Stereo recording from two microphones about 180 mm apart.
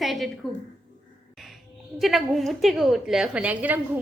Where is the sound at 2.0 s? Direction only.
Centre (ahead or behind).